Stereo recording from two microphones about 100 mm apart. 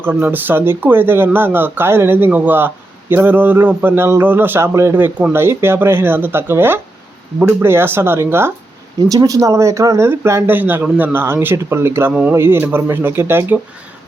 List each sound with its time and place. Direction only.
0.0 s speech: 20° right (ahead or behind)
9.0 s speech: 35° right (ahead or behind)